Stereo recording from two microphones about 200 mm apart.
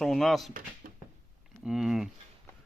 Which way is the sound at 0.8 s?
45° right (ahead or behind).